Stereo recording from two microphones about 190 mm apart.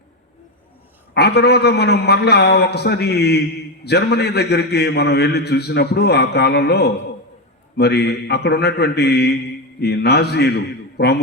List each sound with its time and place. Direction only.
1.1 s a man's voice: 60° left (ahead or behind)